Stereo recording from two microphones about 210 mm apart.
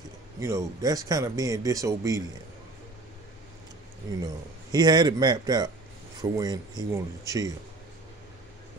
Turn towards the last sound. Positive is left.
turn(degrees=-15)  # may be behind; listen again after turning